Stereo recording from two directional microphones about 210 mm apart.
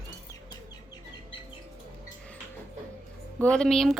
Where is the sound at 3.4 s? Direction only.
5° left (ahead or behind).